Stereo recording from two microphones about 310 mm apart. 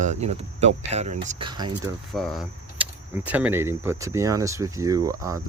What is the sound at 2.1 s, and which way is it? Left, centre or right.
Speech, centre.